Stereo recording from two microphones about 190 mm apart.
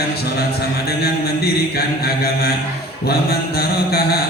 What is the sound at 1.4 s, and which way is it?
Speech, 55° left (ahead or behind).